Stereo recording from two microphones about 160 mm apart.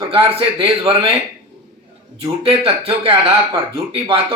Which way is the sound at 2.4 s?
35° right (ahead or behind).